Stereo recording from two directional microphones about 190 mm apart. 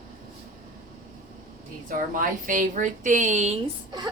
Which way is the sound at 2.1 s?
45° right (ahead or behind).